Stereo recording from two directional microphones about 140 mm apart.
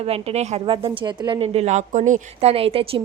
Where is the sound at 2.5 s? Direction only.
45° right (ahead or behind).